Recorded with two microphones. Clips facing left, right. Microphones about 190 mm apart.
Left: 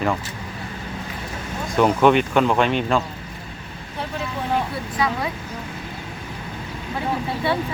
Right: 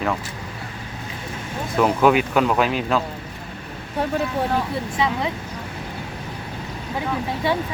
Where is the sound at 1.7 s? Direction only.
Centre (ahead or behind).